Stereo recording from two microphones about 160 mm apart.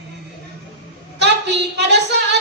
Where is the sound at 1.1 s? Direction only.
90° right.